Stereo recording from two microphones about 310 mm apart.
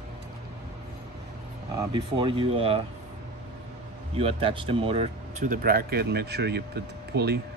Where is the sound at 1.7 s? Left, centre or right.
Centre.